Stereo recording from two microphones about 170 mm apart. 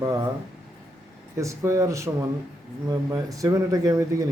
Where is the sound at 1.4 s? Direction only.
15° right (ahead or behind).